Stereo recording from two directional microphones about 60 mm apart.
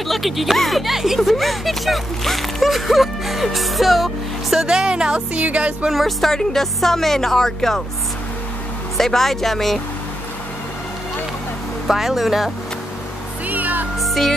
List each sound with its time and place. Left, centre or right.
0.1 s speech: centre; by 5.9 s right
5.9 s speech: centre
8.9 s speech: centre
11.9 s speech: centre
13.5 s music: right
13.9 s music: centre